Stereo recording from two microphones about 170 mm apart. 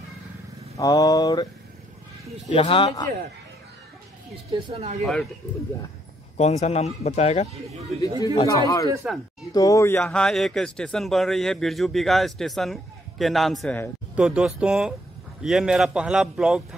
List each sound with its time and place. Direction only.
0.7 s mantra: 20° left (ahead or behind)
2.5 s speech: 35° left (ahead or behind)
4.5 s speech: 35° right (ahead or behind)
5.0 s a man's voice: centre (ahead or behind)
6.3 s speech: 40° left (ahead or behind)
8.5 s mantra: 20° left (ahead or behind)
9.0 s a man's voice: 5° right (ahead or behind)
9.4 s speech: 20° left (ahead or behind)
10.0 s a man's voice: 5° left (ahead or behind)